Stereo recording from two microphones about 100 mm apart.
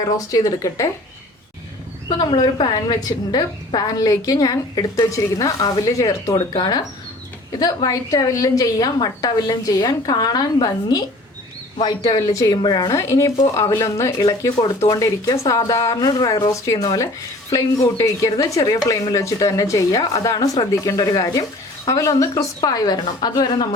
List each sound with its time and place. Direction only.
0.0 s speech: 35° left (ahead or behind)
2.1 s a woman's voice: 50° left (ahead or behind); by 6.3 s 35° left (ahead or behind)
6.5 s a woman's voice: 45° left (ahead or behind)
12.2 s speech: 35° left (ahead or behind)
12.9 s speech: 30° left (ahead or behind)
14.2 s speech: 40° left (ahead or behind)